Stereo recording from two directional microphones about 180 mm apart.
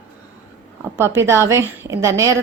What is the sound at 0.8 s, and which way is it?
Speech, 15° right (ahead or behind).